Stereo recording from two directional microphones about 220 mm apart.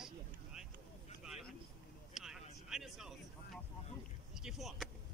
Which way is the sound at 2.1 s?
Centre (ahead or behind).